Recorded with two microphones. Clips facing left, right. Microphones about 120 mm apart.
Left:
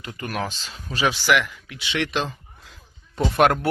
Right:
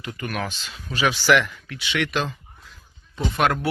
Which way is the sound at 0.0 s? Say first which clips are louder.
Even; 30° left (ahead or behind).